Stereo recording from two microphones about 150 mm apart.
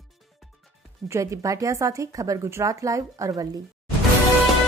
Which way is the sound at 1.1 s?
20° right (ahead or behind).